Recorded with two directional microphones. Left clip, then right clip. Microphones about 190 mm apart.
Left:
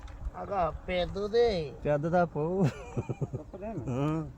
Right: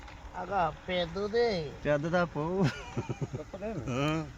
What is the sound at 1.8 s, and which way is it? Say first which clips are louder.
Speech: left 1 dB; 45° left (ahead or behind).